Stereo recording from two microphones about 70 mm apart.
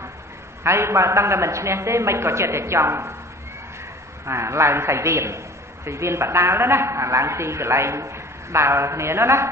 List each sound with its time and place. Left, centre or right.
0.7 s a woman's voice: right
4.3 s a woman's voice: right